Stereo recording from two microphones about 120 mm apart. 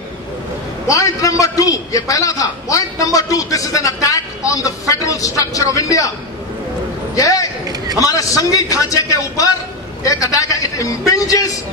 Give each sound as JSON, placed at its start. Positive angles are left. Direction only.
{"t": 0.8, "sound": "a man's voice", "side_deg": 30}
{"t": 7.2, "sound": "a man's voice", "side_deg": 30}